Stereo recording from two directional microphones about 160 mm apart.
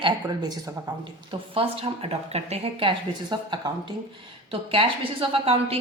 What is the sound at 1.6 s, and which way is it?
A woman's voice, 40° right (ahead or behind).